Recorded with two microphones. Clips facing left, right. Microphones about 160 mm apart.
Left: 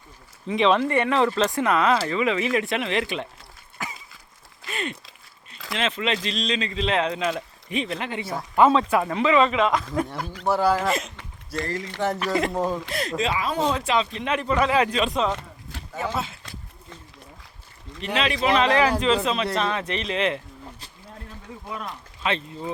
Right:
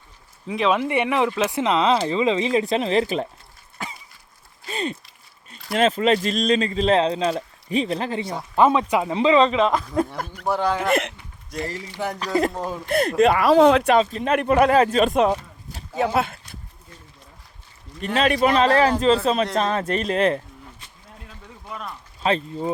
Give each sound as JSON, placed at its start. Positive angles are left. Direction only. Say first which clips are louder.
{"t": 0.4, "sound": "speech", "louder": "left 1 dB", "side_deg": -5}
{"t": 0.8, "sound": "speech", "louder": "even", "side_deg": -15}
{"t": 4.7, "sound": "a sound", "louder": "right 4 dB", "side_deg": -35}
{"t": 5.5, "sound": "speech", "louder": "right 8 dB", "side_deg": -40}
{"t": 8.5, "sound": "speech", "louder": "even", "side_deg": -15}
{"t": 9.1, "sound": "speech", "louder": "right 4 dB", "side_deg": -30}
{"t": 10.4, "sound": "speech", "louder": "left 1 dB", "side_deg": 5}
{"t": 12.9, "sound": "speech", "louder": "right 9 dB", "side_deg": -55}
{"t": 14.0, "sound": "speech", "louder": "right 5 dB", "side_deg": -40}
{"t": 14.3, "sound": "a man's voice", "louder": "right 5 dB", "side_deg": -55}
{"t": 16.0, "sound": "speech", "louder": "right 7 dB", "side_deg": -65}
{"t": 18.0, "sound": "a man's voice", "louder": "right 5 dB", "side_deg": -45}
{"t": 22.2, "sound": "speech", "louder": "right 5 dB", "side_deg": -40}